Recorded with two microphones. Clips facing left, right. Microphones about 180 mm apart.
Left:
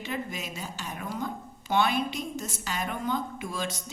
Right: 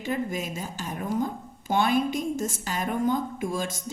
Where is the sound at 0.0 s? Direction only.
45° right (ahead or behind).